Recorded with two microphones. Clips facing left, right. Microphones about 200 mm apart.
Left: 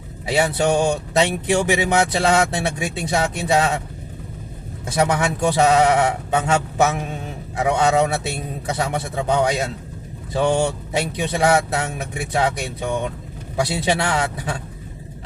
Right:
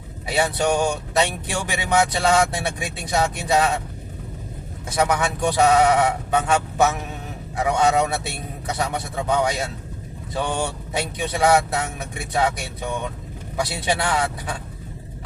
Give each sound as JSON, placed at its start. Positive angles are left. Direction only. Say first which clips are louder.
{"t": 0.3, "sound": "speech", "louder": "left 2 dB", "side_deg": 25}
{"t": 5.0, "sound": "speech", "louder": "left 2 dB", "side_deg": 25}